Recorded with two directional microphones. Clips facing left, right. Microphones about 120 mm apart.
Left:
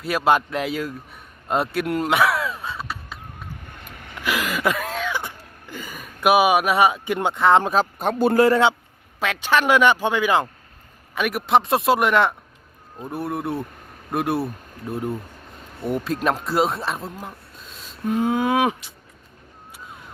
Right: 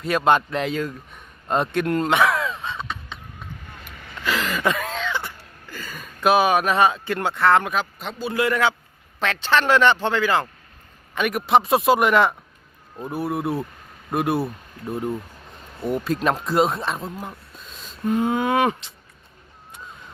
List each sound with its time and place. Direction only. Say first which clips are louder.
0.0 s speech: right 1 dB; 5° left (ahead or behind)
1.5 s crow: right 1 dB; 5° left (ahead or behind)
4.1 s throat clearing: even; 10° left (ahead or behind)
7.6 s speech: left 5 dB; 35° left (ahead or behind)
7.9 s a man's voice: left 8 dB; 50° left (ahead or behind)
9.2 s speech: even; 10° left (ahead or behind)
11.1 s speech: right 1 dB; 5° left (ahead or behind)